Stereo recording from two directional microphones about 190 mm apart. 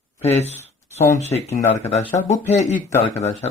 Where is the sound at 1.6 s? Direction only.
15° left (ahead or behind).